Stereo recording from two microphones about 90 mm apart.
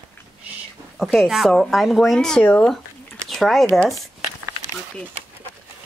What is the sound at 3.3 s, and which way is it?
Speech, centre (ahead or behind).